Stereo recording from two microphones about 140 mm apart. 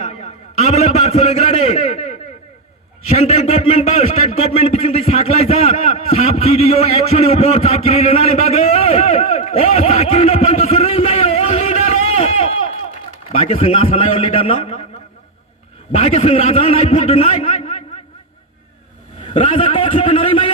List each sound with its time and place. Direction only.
0.0 s a sound: 50° left (ahead or behind)
3.1 s a man's voice: 50° left (ahead or behind)
16.0 s a man's voice: 50° left (ahead or behind)
19.2 s a man's voice: 40° left (ahead or behind)